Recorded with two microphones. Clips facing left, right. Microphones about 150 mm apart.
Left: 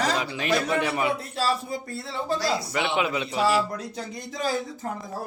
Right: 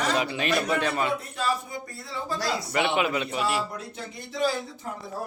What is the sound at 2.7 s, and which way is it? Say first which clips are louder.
Speech: right 5 dB; centre (ahead or behind).